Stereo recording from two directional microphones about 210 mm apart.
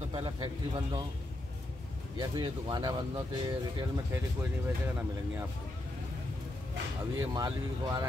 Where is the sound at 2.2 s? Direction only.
20° right (ahead or behind).